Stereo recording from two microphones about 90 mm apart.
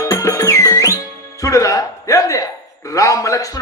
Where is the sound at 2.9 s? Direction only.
35° left (ahead or behind).